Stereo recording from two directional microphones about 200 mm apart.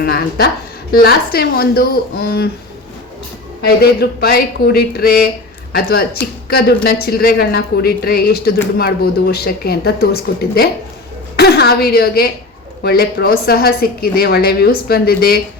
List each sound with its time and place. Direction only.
0.0 s a woman's voice: 50° left (ahead or behind)
3.6 s a woman's voice: 50° left (ahead or behind)